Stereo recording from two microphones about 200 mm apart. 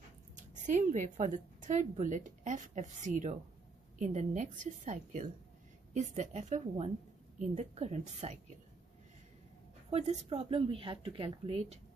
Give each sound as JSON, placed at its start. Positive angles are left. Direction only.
{"t": 0.6, "sound": "a woman's voice", "side_deg": -40}
{"t": 9.8, "sound": "a woman's voice", "side_deg": -30}